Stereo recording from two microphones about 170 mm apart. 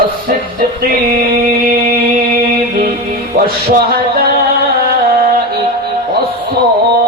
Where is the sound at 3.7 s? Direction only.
60° right (ahead or behind).